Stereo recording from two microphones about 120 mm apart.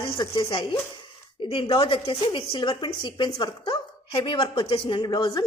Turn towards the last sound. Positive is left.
turn(degrees=40)  # may be behind; listen again after turning